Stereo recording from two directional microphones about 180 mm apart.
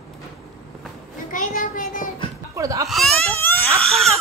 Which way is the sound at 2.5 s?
20° right (ahead or behind).